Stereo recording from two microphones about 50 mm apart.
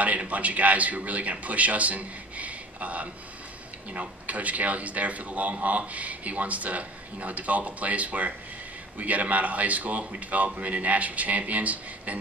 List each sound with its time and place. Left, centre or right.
0.0 s a man's voice: right